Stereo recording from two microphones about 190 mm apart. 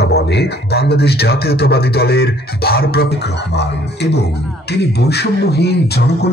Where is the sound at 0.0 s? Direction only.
60° left (ahead or behind).